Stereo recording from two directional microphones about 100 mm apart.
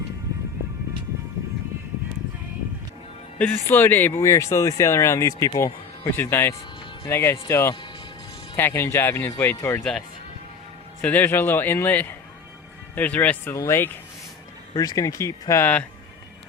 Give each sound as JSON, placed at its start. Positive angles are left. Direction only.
{"t": 3.3, "sound": "speech", "side_deg": 20}
{"t": 11.0, "sound": "speech", "side_deg": 20}
{"t": 14.8, "sound": "speech", "side_deg": 35}